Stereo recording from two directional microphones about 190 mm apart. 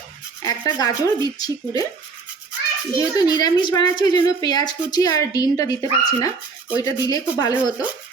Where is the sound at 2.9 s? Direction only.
20° left (ahead or behind).